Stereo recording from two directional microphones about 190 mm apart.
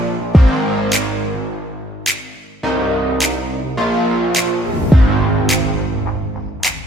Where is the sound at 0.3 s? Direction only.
Centre (ahead or behind).